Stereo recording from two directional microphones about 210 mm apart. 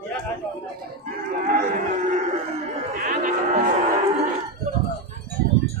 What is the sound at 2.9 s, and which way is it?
Cattle, 40° right (ahead or behind).